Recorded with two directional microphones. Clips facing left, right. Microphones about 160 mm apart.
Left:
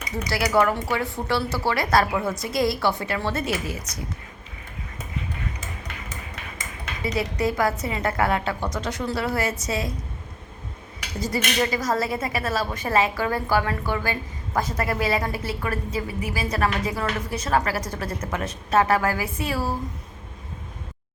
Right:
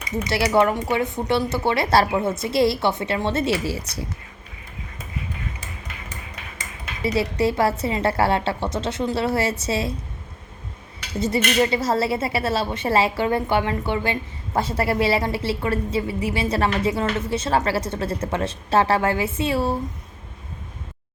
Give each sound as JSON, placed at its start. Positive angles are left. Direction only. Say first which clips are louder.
{"t": 0.3, "sound": "a woman's voice", "louder": "right 2 dB", "side_deg": -25}
{"t": 7.0, "sound": "a woman's voice", "louder": "right 4 dB", "side_deg": -30}
{"t": 11.2, "sound": "a woman's voice", "louder": "right 4 dB", "side_deg": -25}